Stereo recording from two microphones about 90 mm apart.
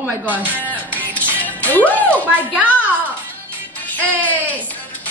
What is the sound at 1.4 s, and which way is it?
A woman's voice, 20° left (ahead or behind).